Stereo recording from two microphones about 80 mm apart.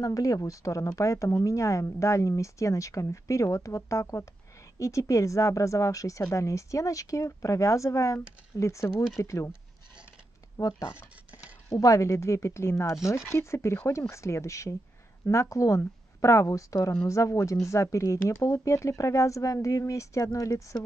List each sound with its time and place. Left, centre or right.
0.0 s speech: left
11.7 s speech: left